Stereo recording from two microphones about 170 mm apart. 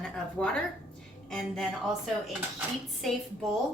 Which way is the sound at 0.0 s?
5° left (ahead or behind).